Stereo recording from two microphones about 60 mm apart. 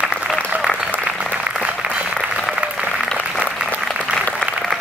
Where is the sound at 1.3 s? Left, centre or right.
Centre.